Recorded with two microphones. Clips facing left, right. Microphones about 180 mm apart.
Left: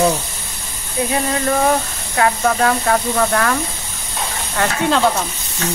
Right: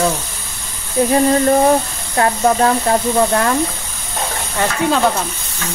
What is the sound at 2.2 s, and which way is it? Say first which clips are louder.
Speech: right 2 dB; 25° right (ahead or behind).